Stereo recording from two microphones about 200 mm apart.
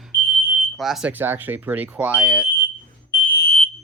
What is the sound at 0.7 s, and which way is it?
Speech, centre (ahead or behind).